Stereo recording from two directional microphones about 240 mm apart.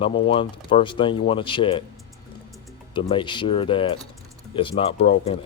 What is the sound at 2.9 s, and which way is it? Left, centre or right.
Speech, centre.